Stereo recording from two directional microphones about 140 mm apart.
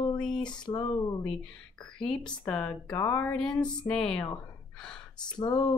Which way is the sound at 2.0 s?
5° left (ahead or behind).